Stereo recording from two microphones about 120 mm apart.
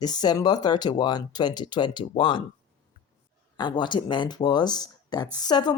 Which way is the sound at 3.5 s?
40° left (ahead or behind).